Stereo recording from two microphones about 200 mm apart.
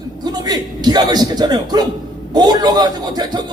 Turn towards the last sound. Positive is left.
turn(degrees=-20)  # may be behind; listen again after turning